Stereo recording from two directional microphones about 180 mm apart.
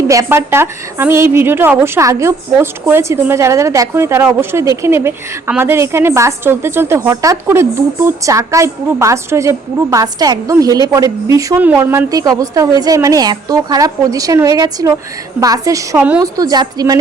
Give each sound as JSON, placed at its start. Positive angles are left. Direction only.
{"t": 0.1, "sound": "a woman's voice", "side_deg": -15}
{"t": 16.2, "sound": "a woman's voice", "side_deg": -20}